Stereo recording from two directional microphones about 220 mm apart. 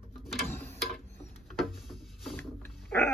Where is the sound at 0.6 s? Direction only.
Centre (ahead or behind).